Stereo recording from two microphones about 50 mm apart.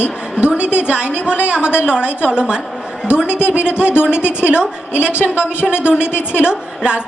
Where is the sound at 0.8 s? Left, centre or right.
Right.